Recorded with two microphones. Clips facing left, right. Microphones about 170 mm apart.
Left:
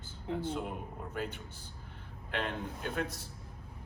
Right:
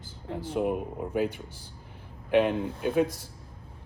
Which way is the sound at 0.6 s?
60° right (ahead or behind).